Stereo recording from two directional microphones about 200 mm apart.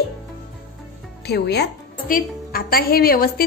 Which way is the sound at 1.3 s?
55° left (ahead or behind).